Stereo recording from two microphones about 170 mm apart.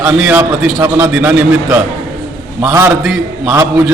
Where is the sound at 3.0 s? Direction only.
Centre (ahead or behind).